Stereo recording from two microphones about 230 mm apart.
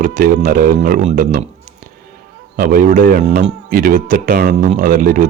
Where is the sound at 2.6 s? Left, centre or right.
Right.